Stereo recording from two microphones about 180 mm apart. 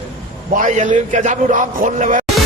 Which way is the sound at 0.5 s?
45° right (ahead or behind).